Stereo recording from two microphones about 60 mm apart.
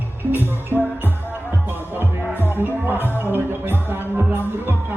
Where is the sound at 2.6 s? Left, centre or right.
Right.